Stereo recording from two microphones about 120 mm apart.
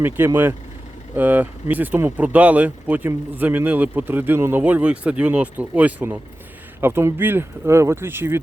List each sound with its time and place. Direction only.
0.2 s speech: 15° right (ahead or behind)